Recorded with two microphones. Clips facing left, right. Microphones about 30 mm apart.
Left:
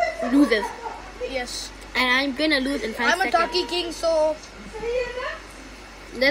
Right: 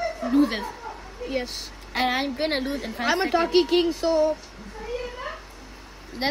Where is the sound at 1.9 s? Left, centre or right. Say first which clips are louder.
Left 3 dB; left.